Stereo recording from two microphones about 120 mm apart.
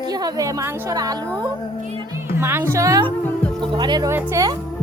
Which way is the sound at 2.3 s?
20° right (ahead or behind).